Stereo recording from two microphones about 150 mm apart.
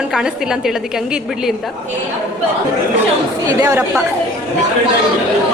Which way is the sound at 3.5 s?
20° right (ahead or behind).